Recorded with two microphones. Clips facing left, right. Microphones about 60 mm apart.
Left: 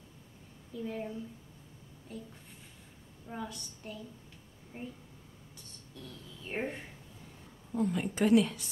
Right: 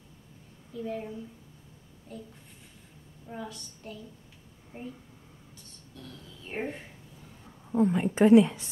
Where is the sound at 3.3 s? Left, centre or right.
Centre.